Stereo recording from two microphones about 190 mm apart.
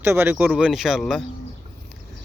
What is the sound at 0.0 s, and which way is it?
Speech, 10° right (ahead or behind).